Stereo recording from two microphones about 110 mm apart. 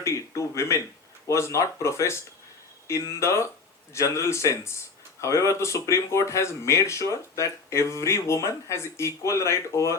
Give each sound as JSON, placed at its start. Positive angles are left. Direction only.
{"t": 0.0, "sound": "speech", "side_deg": 25}